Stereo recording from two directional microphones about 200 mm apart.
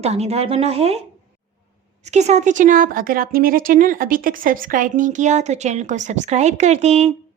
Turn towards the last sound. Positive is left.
turn(degrees=-30)  # may be behind; listen again after turning